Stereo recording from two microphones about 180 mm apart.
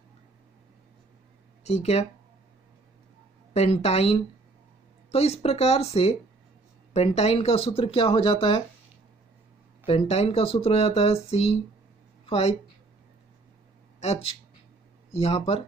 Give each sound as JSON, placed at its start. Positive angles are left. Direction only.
{"t": 1.6, "sound": "speech", "side_deg": 40}
{"t": 3.5, "sound": "speech", "side_deg": 35}
{"t": 9.8, "sound": "speech", "side_deg": 35}
{"t": 13.9, "sound": "speech", "side_deg": 35}